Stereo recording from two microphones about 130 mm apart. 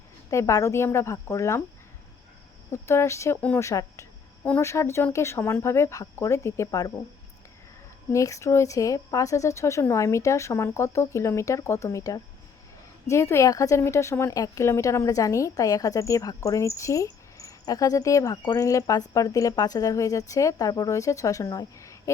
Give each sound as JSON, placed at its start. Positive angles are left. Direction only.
{"t": 0.3, "sound": "a woman's voice", "side_deg": 25}
{"t": 2.7, "sound": "a woman's voice", "side_deg": 20}
{"t": 8.1, "sound": "a woman's voice", "side_deg": 25}